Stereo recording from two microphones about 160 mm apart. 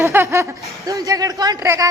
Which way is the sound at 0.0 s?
15° right (ahead or behind).